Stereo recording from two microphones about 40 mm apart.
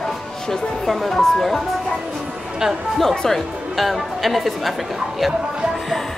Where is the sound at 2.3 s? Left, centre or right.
Centre.